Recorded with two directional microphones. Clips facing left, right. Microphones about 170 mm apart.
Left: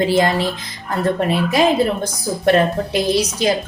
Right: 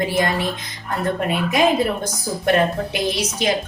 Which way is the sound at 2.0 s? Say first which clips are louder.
Left 4 dB; 35° left (ahead or behind).